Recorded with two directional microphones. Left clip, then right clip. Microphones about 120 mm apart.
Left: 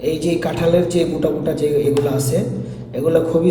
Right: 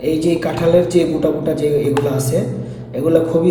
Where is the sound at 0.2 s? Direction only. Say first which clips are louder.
Right 2 dB; 20° left (ahead or behind).